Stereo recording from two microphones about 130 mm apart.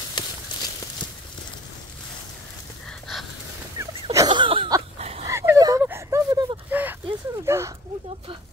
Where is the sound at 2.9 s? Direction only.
Centre (ahead or behind).